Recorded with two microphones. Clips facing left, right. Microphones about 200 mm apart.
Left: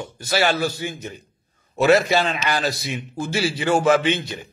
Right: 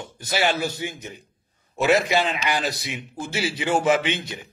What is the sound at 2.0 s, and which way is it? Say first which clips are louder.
A man's voice: left 2 dB; 15° right (ahead or behind).